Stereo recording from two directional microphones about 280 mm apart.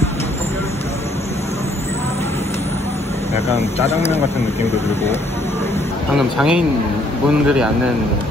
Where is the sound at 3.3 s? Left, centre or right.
Left.